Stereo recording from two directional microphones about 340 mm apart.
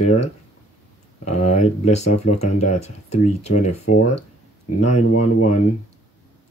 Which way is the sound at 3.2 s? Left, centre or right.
Centre.